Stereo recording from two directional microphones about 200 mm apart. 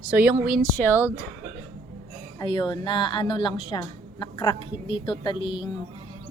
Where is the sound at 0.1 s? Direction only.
5° right (ahead or behind).